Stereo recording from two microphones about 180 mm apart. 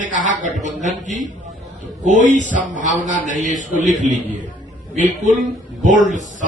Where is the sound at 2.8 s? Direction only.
45° right (ahead or behind).